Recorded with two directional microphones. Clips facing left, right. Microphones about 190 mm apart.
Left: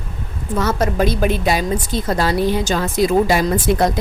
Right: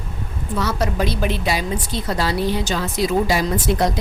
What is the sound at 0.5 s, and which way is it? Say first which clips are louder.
A woman's voice: left 4 dB; 50° left (ahead or behind).